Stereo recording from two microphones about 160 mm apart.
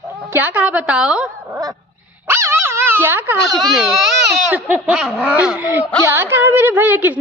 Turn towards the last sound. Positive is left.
turn(degrees=-10)  # may be behind; listen again after turning